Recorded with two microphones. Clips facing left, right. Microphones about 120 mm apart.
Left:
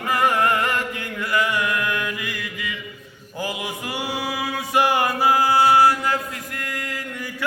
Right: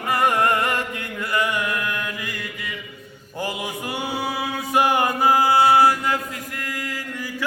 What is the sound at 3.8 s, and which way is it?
Music, 20° right (ahead or behind).